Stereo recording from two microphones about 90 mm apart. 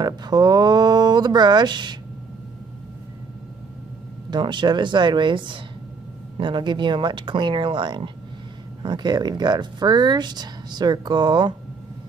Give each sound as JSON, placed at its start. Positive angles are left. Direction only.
{"t": 0.0, "sound": "speech", "side_deg": -50}
{"t": 4.3, "sound": "speech", "side_deg": -60}